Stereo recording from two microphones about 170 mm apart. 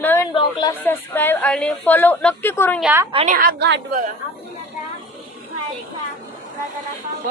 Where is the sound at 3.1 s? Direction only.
50° right (ahead or behind); by 3.8 s 85° right.